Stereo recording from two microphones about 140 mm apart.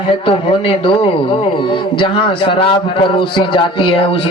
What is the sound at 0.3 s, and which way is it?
A man's voice, 40° left (ahead or behind).